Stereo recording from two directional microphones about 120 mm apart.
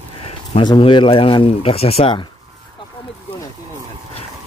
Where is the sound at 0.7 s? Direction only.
45° left (ahead or behind).